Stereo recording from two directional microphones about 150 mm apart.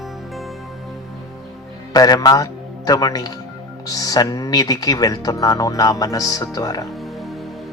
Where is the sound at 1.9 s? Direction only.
25° left (ahead or behind).